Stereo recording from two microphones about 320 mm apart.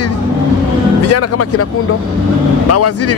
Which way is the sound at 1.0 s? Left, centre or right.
Left.